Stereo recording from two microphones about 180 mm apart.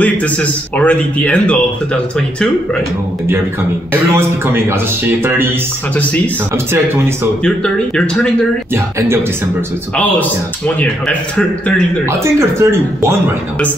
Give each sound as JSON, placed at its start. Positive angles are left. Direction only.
{"t": 0.0, "sound": "speech", "side_deg": 10}
{"t": 4.1, "sound": "a man's voice", "side_deg": -15}
{"t": 7.4, "sound": "speech", "side_deg": 5}
{"t": 8.7, "sound": "a man's voice", "side_deg": -15}
{"t": 10.8, "sound": "speech", "side_deg": 5}
{"t": 12.1, "sound": "a man's voice", "side_deg": -15}